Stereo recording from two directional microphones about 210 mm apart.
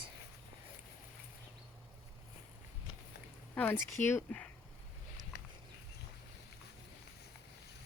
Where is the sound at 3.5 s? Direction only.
10° left (ahead or behind).